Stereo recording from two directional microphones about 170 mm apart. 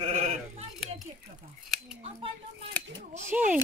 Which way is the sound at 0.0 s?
40° right (ahead or behind).